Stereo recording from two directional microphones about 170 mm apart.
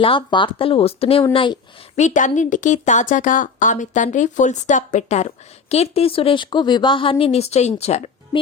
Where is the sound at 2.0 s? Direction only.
45° left (ahead or behind).